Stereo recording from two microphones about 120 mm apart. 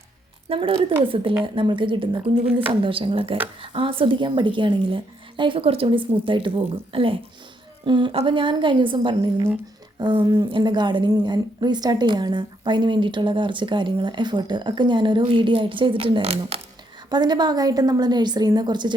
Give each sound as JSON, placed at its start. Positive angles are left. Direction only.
{"t": 0.4, "sound": "a woman's voice", "side_deg": -50}
{"t": 17.1, "sound": "a woman's voice", "side_deg": -35}